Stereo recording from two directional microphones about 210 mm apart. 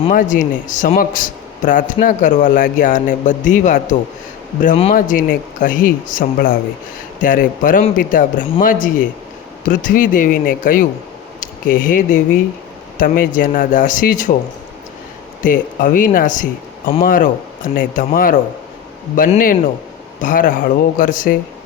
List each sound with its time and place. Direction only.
0.1 s a man's voice: 40° left (ahead or behind)
15.4 s a man's voice: 40° left (ahead or behind)